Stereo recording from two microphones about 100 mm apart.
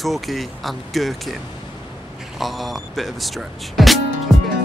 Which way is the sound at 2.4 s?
Centre (ahead or behind).